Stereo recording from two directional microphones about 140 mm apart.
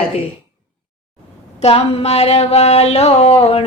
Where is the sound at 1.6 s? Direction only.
45° left (ahead or behind).